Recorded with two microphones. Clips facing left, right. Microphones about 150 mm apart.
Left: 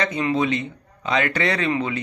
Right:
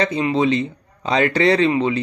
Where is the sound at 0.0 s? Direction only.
30° right (ahead or behind).